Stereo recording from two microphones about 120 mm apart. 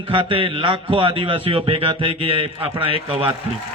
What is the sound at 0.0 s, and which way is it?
A man's voice, 45° right (ahead or behind).